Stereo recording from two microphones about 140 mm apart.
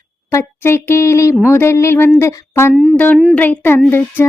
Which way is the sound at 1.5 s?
20° left (ahead or behind).